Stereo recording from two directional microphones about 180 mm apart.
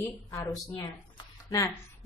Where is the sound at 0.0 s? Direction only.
20° left (ahead or behind).